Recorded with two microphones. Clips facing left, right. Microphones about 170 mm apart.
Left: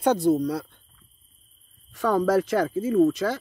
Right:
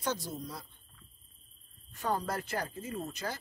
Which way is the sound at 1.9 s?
90° left.